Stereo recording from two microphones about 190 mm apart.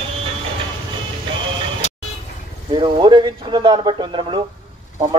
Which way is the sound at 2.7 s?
25° right (ahead or behind).